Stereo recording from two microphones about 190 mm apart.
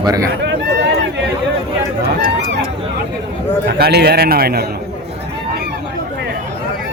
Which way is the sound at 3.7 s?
55° right (ahead or behind).